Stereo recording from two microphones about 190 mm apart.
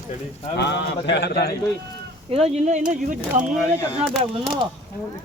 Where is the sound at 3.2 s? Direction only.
5° right (ahead or behind).